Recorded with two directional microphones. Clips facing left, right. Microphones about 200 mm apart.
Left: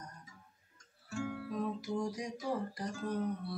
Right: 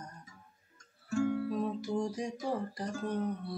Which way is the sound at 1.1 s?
40° right (ahead or behind).